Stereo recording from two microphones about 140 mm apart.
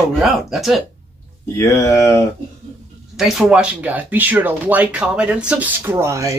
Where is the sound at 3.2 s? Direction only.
5° right (ahead or behind).